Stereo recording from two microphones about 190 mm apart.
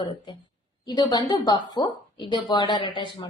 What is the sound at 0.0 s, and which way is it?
A woman's voice, 25° left (ahead or behind).